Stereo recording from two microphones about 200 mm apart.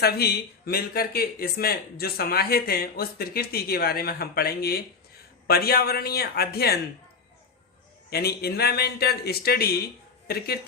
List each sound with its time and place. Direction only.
0.0 s speech: 50° left (ahead or behind)
8.1 s speech: 50° left (ahead or behind)